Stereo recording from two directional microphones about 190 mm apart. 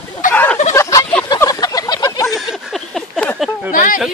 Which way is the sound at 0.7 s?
15° left (ahead or behind).